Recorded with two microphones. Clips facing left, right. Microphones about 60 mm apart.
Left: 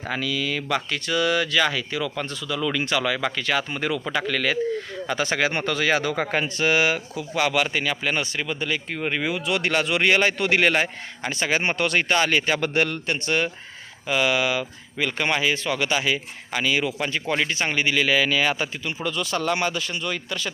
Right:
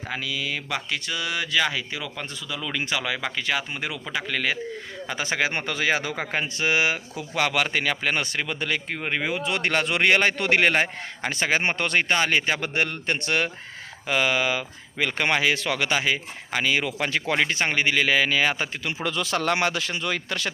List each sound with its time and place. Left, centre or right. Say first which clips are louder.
0.1 s speech: left 3 dB; centre
7.2 s speech: left 1 dB; right
8.9 s a man's voice: left 1 dB; right
13.1 s speech: left 1 dB; right
14.1 s speech: left 1 dB; right
15.9 s a man's voice: left 1 dB; right
17.1 s speech: right 1 dB; right
17.3 s a man's voice: even; right
19.0 s speech: even; right